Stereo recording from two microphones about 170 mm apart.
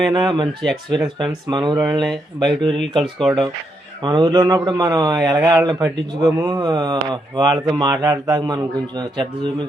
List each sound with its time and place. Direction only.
0.1 s a man's voice: 25° right (ahead or behind)
1.5 s a man's voice: 25° right (ahead or behind)
1.8 s speech: centre (ahead or behind)
4.0 s a man's voice: 25° right (ahead or behind)